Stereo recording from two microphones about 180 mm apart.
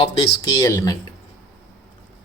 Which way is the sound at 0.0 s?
25° left (ahead or behind).